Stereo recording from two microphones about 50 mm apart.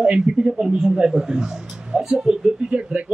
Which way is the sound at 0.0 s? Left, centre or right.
Centre.